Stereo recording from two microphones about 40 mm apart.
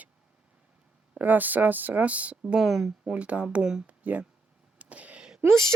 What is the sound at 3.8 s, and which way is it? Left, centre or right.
Speech, right.